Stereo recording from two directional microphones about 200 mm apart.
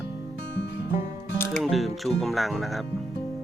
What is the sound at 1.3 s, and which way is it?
Music, 10° left (ahead or behind).